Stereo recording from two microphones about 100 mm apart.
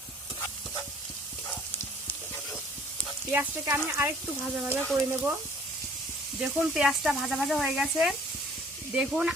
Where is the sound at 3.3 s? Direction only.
20° right (ahead or behind).